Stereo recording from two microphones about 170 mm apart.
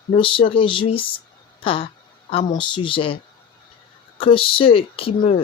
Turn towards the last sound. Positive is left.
turn(degrees=35)  # may be behind; listen again after turning